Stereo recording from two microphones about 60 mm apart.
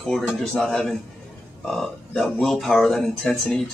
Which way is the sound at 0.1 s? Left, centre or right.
Centre.